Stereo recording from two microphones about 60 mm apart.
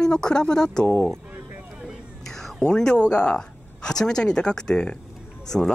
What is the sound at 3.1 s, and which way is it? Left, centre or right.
Speech, centre.